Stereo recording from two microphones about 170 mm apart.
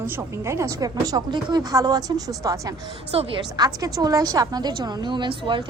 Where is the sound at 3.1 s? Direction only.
35° right (ahead or behind).